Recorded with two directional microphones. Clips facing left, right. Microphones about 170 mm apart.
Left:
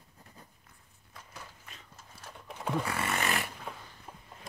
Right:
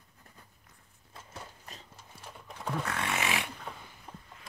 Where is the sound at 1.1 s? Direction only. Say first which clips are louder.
Right 2 dB; 30° right (ahead or behind).